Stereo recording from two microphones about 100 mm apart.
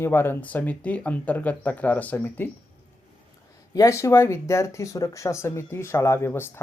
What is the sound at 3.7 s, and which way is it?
Speech, 30° left (ahead or behind).